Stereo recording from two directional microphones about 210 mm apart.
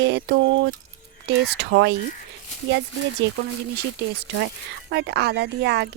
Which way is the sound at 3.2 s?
55° right (ahead or behind).